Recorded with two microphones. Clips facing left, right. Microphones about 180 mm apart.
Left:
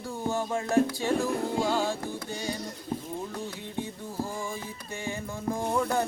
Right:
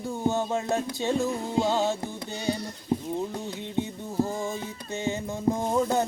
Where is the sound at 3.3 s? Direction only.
20° right (ahead or behind).